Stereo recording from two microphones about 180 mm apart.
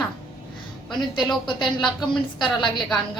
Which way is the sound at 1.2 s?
Centre (ahead or behind).